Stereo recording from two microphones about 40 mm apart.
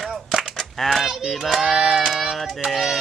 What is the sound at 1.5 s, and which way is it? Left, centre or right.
Child singing, centre.